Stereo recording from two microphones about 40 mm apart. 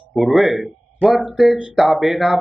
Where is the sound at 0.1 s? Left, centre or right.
Centre.